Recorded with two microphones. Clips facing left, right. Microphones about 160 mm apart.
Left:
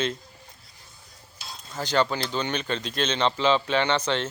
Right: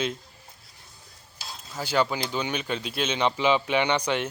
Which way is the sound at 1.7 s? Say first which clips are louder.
Left 1 dB; 10° right (ahead or behind).